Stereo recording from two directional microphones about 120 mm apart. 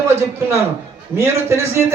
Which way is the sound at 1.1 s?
20° right (ahead or behind).